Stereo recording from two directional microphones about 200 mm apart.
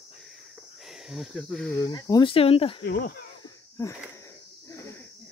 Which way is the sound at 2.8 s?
45° left (ahead or behind).